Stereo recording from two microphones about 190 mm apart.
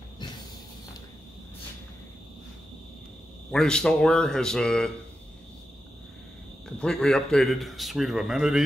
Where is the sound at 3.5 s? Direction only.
5° left (ahead or behind).